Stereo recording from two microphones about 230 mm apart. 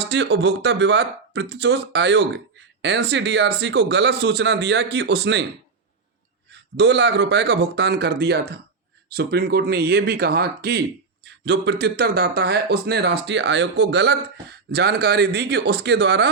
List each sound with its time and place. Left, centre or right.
0.0 s speech: right
6.5 s speech: right